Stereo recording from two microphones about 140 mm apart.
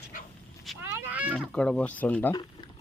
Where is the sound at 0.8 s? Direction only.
10° right (ahead or behind).